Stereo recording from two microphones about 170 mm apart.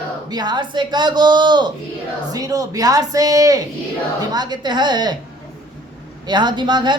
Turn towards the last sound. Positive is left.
turn(degrees=-25)  # may be behind; listen again after turning